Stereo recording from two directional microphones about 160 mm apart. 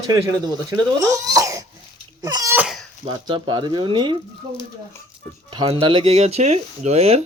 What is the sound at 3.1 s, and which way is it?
A man's voice, 30° right (ahead or behind).